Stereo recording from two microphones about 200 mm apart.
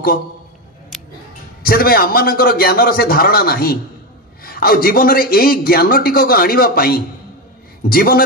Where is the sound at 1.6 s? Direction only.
50° left (ahead or behind).